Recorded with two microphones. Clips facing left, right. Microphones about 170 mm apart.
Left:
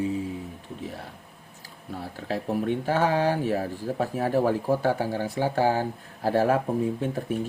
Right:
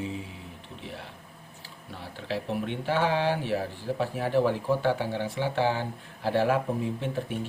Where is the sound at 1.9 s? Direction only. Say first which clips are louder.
Left 3 dB; 45° left (ahead or behind).